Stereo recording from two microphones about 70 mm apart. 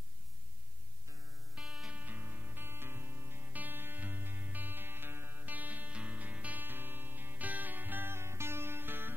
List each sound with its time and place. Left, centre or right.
1.6 s music: centre
1.9 s music: right